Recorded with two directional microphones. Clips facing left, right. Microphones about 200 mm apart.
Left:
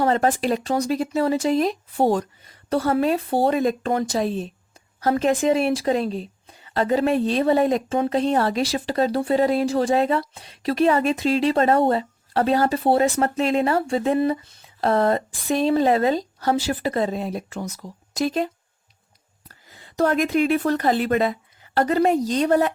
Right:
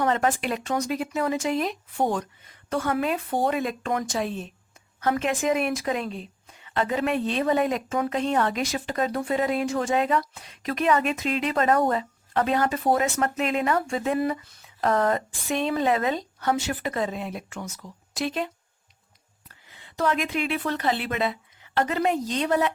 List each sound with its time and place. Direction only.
0.0 s a woman's voice: 35° left (ahead or behind)